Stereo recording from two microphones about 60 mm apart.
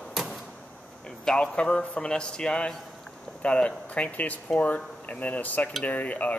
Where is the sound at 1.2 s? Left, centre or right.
Centre.